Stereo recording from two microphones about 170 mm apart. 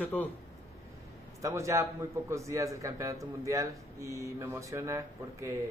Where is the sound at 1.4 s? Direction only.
20° right (ahead or behind).